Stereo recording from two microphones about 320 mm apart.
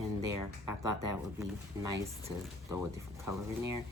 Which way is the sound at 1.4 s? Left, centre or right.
Centre.